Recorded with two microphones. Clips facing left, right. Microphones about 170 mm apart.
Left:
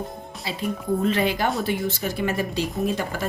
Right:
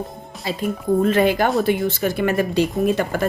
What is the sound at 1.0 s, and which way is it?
A woman's voice, 50° right (ahead or behind).